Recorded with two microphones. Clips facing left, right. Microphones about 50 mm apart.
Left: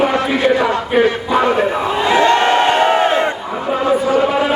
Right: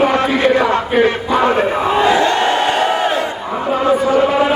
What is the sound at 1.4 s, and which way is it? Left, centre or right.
Crowd, right.